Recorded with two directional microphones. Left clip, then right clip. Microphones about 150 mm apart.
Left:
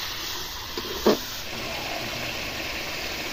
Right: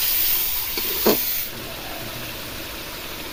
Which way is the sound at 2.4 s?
50° right (ahead or behind).